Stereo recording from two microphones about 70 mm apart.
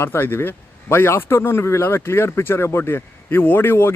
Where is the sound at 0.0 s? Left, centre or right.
Left.